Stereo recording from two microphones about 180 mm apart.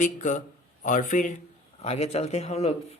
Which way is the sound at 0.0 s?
45° left (ahead or behind).